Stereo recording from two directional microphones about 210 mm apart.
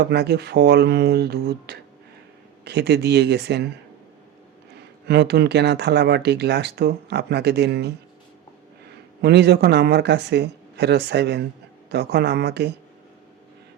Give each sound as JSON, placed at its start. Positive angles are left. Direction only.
{"t": 0.0, "sound": "speech", "side_deg": -50}
{"t": 5.0, "sound": "speech", "side_deg": -50}
{"t": 9.2, "sound": "speech", "side_deg": -55}